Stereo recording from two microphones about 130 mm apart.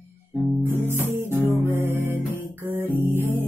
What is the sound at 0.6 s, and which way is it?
Music, 15° right (ahead or behind).